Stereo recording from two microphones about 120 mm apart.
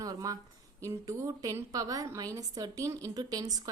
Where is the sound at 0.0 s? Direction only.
30° right (ahead or behind).